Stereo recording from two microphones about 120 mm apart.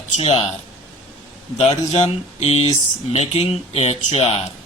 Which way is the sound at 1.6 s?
60° left (ahead or behind).